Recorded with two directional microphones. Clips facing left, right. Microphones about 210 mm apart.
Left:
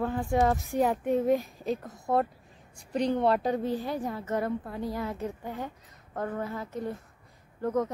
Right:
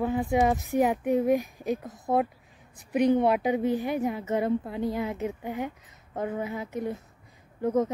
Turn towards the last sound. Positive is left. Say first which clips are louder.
# right 3 dB
turn(degrees=-20)  # may be behind; listen again after turning